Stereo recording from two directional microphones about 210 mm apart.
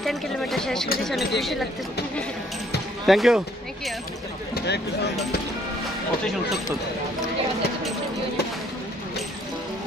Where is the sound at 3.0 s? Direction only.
Centre (ahead or behind).